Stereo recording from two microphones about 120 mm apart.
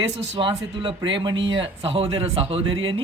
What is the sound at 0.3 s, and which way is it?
Speech, 45° right (ahead or behind).